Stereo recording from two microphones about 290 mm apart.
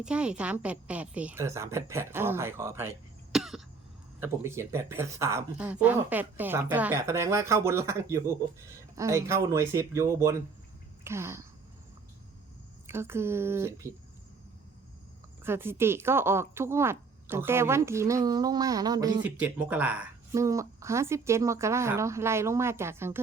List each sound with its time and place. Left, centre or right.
0.0 s speech: centre
3.3 s cough: centre
4.2 s speech: centre
11.0 s a sound: centre
12.9 s speech: centre
15.4 s speech: centre